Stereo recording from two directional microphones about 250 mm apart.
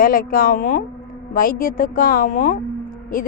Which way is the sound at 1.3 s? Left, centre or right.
Left.